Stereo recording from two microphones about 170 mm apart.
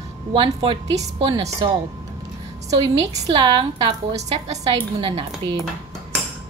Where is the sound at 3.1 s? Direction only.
25° right (ahead or behind).